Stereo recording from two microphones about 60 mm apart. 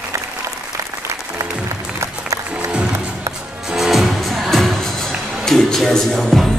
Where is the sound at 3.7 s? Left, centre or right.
Centre.